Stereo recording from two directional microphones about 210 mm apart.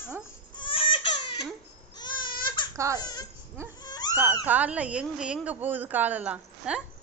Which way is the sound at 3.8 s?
20° left (ahead or behind).